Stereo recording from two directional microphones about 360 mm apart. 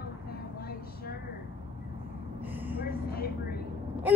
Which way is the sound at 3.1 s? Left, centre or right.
Left.